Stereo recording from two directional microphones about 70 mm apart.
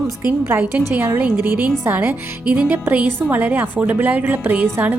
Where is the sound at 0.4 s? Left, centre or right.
Right.